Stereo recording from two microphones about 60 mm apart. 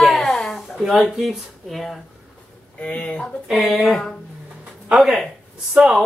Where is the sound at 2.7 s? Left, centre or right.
Left.